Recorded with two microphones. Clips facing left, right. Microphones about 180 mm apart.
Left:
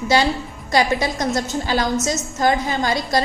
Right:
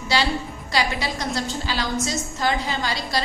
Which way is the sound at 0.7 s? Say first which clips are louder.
Left 6 dB; 45° left (ahead or behind).